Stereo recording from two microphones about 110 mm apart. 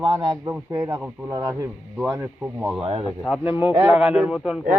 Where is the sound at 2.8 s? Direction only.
65° right (ahead or behind).